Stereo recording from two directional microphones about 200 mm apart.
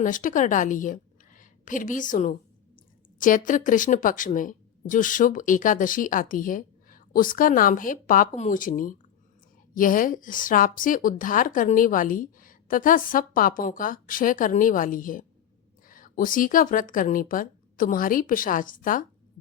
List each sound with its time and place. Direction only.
0.0 s a woman's voice: 40° left (ahead or behind)